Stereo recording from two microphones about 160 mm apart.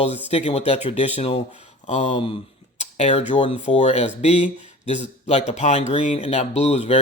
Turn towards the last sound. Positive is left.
turn(degrees=40)  # may be behind; listen again after turning